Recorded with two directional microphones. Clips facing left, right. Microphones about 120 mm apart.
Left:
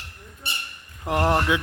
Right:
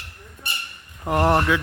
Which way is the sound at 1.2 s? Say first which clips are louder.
Right 3 dB; 10° right (ahead or behind).